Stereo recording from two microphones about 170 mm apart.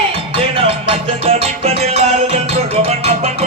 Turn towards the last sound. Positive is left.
turn(degrees=-40)  # may be behind; listen again after turning